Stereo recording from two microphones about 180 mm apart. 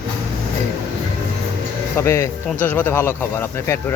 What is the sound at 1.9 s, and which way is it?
Speech, 15° left (ahead or behind).